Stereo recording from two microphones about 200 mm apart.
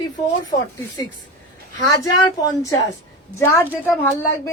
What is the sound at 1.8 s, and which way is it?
A woman's voice, 20° left (ahead or behind).